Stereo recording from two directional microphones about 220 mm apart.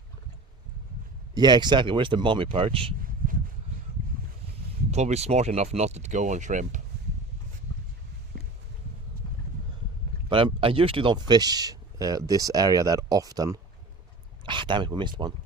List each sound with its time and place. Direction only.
1.3 s speech: 20° right (ahead or behind)
3.2 s a sound: 40° right (ahead or behind)
4.9 s speech: 30° right (ahead or behind)
10.2 s speech: 25° right (ahead or behind)